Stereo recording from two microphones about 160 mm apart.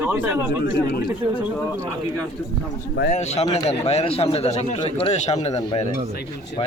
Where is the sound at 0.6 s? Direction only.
75° left (ahead or behind).